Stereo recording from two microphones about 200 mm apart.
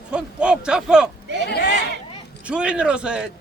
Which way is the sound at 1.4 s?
55° left (ahead or behind).